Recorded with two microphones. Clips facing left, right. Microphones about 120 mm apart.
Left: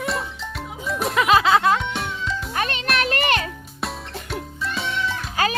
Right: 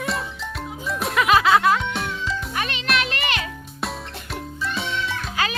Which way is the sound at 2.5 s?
40° left (ahead or behind).